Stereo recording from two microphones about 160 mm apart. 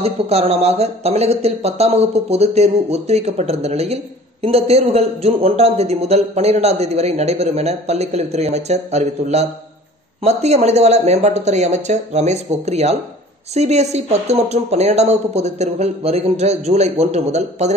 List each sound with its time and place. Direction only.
0.0 s speech: 40° right (ahead or behind)